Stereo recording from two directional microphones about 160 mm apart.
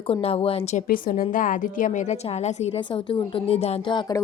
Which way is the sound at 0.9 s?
60° left (ahead or behind).